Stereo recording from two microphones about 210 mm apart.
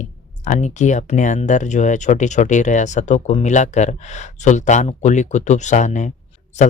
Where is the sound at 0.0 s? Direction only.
35° left (ahead or behind).